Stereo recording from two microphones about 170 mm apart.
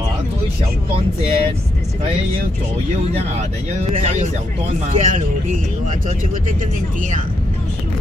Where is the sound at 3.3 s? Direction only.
40° right (ahead or behind).